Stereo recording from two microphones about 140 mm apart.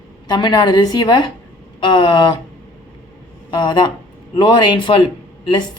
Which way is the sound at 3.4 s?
30° left (ahead or behind).